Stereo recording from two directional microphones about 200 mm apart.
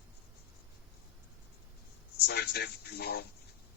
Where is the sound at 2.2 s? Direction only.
55° left (ahead or behind).